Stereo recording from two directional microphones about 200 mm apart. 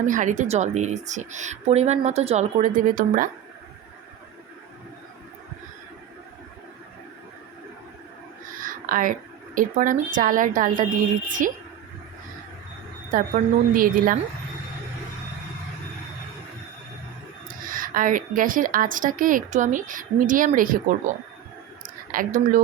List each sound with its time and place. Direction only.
0.0 s a woman's voice: 40° right (ahead or behind)
8.5 s a sound: 45° right (ahead or behind)
9.6 s a woman's voice: 40° right (ahead or behind)
13.1 s a woman's voice: 40° right (ahead or behind)
17.5 s a woman's voice: 45° right (ahead or behind)
21.8 s a sound: 40° right (ahead or behind)